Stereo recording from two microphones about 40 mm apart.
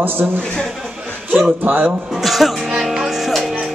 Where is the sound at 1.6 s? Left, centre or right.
Right.